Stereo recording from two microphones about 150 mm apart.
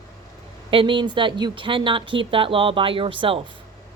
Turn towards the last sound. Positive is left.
turn(degrees=-35)  # may be behind; listen again after turning